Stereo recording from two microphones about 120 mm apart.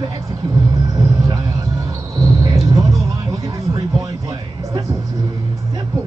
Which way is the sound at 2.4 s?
30° right (ahead or behind).